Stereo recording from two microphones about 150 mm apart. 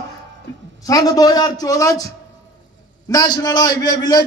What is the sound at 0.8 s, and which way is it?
A man's voice, 25° left (ahead or behind).